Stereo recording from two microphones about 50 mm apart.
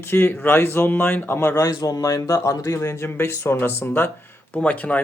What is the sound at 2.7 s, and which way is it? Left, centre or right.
Speech, left.